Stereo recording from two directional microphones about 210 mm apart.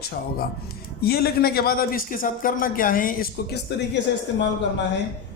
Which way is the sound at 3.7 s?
55° left (ahead or behind).